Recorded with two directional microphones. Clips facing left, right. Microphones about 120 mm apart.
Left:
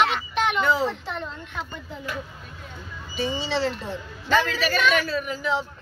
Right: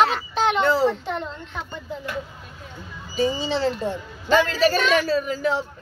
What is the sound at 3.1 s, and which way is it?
Speech, 40° right (ahead or behind).